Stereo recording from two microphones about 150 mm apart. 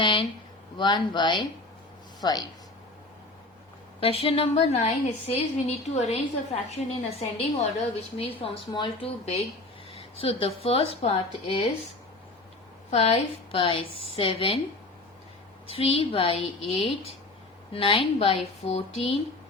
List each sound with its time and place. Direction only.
0.0 s a sound: 35° left (ahead or behind)
0.8 s a woman's voice: 30° left (ahead or behind)
4.0 s a woman's voice: 40° left (ahead or behind)
12.9 s a woman's voice: 45° left (ahead or behind)
15.6 s a woman's voice: 40° left (ahead or behind)